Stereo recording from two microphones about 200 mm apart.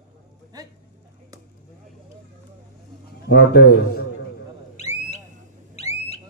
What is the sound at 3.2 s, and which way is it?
Speech, 50° left (ahead or behind).